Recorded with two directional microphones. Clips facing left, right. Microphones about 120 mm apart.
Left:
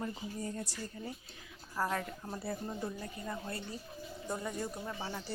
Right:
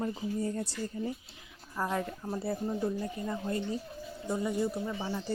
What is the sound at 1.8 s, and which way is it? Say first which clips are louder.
Speech: right 3 dB; 20° right (ahead or behind).